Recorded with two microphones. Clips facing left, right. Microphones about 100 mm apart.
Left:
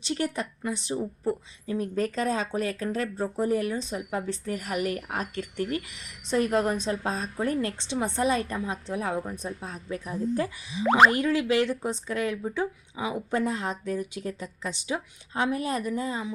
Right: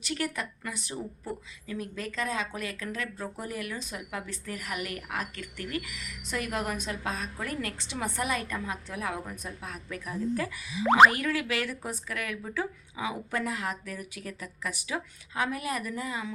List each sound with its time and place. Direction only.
0.0 s speech: 30° left (ahead or behind)